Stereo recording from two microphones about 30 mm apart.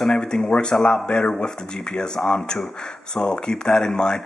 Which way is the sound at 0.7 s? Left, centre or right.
Left.